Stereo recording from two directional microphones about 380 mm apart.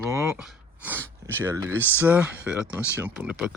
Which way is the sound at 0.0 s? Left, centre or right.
Centre.